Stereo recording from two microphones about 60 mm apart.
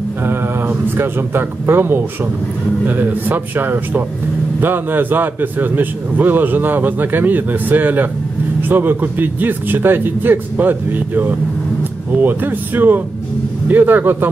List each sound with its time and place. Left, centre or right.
0.2 s a man's voice: right